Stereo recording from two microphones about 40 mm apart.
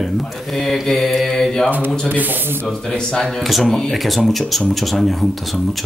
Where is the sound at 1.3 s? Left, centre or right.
Centre.